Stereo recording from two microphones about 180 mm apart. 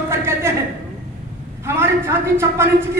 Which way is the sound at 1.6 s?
15° right (ahead or behind).